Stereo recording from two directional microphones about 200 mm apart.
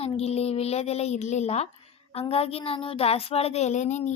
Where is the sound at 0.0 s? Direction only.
30° left (ahead or behind).